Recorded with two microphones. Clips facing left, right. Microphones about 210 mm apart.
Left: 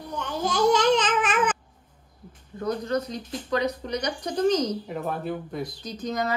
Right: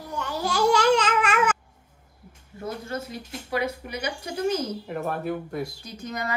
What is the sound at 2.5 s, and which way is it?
Speech, 50° left (ahead or behind).